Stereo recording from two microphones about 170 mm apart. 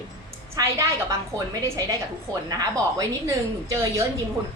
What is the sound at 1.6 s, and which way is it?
A woman's voice, 20° right (ahead or behind).